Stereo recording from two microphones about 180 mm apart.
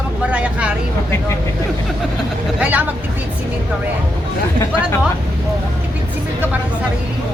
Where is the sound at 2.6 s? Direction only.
10° right (ahead or behind).